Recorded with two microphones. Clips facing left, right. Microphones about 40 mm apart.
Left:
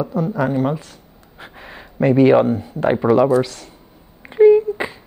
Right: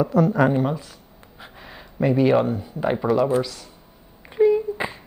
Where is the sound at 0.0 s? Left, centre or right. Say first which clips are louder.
Right 3 dB; right.